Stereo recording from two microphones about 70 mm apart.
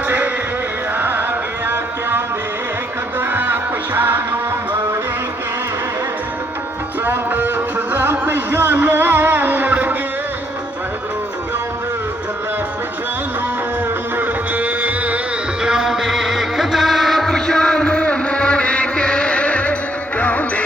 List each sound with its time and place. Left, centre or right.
0.9 s music: right
7.0 s music: right
14.2 s music: right
15.6 s music: centre; by 20.4 s left